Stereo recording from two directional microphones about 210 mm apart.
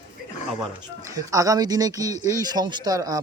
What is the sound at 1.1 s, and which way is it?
Speech, 15° right (ahead or behind).